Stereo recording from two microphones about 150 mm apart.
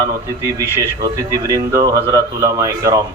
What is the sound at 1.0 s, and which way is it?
A man's voice, 25° right (ahead or behind).